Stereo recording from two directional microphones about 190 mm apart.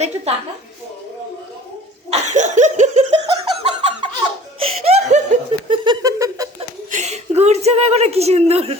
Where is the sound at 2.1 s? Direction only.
40° right (ahead or behind).